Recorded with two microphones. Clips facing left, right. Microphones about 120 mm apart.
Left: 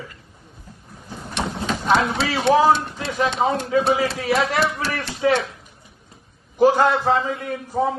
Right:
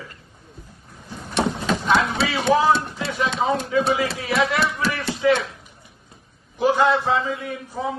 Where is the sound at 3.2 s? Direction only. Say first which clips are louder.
Left 2 dB; 35° left (ahead or behind).